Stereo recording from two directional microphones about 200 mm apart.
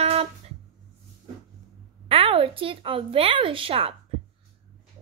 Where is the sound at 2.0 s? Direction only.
30° right (ahead or behind).